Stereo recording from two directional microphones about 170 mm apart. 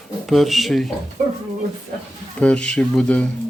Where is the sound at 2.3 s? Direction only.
5° left (ahead or behind).